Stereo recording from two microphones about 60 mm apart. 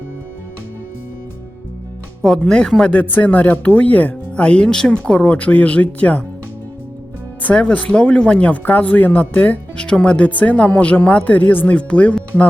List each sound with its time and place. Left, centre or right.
2.2 s speech: centre
2.9 s speech: left
7.4 s speech: left